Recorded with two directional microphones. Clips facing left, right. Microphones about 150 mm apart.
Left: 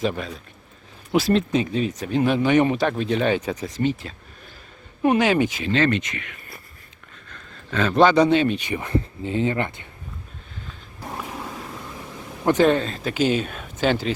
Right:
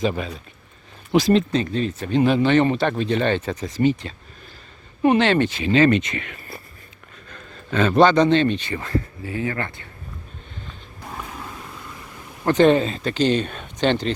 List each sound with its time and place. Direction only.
0.0 s speech: centre (ahead or behind)
3.7 s speech: centre (ahead or behind)
5.6 s speech: 10° right (ahead or behind)
6.0 s speech: 30° right (ahead or behind)
7.7 s speech: centre (ahead or behind); by 9.8 s 20° left (ahead or behind)
12.6 s speech: centre (ahead or behind)